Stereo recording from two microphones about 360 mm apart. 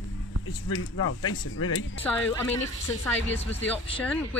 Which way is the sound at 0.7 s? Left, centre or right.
Left.